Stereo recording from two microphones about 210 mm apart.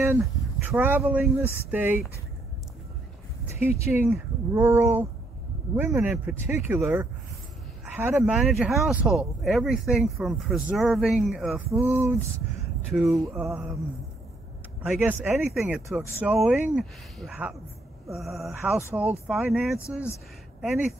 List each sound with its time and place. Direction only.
0.2 s speech: 10° right (ahead or behind)
3.5 s speech: 30° left (ahead or behind)
4.0 s speech: 10° right (ahead or behind)
12.9 s speech: centre (ahead or behind)
14.8 s speech: 10° right (ahead or behind)